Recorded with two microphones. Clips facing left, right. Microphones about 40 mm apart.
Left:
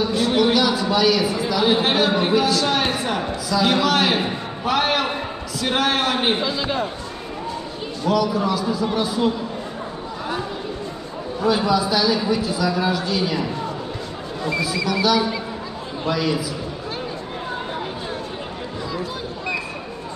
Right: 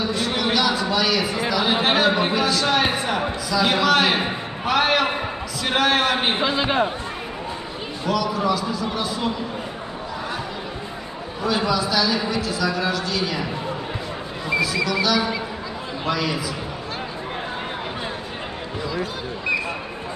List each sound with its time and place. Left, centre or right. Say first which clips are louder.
0.1 s a sound: left 4 dB; centre
1.5 s a man's voice: left 1 dB; centre
6.3 s a man's voice: right 2 dB; right
8.1 s a man's voice: left 2 dB; centre
11.4 s a man's voice: left 3 dB; centre
14.9 s a man's voice: left 2 dB; centre